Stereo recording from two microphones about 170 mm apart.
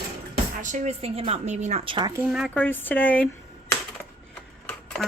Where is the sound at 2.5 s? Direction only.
10° left (ahead or behind).